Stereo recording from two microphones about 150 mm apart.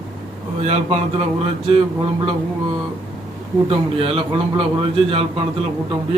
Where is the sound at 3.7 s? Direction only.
40° right (ahead or behind).